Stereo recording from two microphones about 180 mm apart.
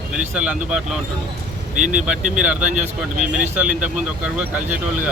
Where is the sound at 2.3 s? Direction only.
5° right (ahead or behind).